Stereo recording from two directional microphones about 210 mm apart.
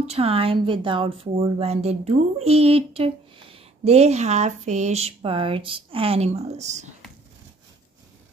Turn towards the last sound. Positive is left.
turn(degrees=-35)  # may be behind; listen again after turning